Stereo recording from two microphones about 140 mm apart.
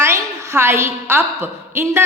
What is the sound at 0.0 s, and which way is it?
A woman's voice, 20° right (ahead or behind).